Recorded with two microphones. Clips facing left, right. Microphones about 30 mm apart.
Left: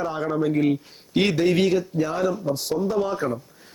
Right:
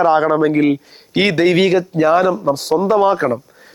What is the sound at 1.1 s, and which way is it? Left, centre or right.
Speech, right.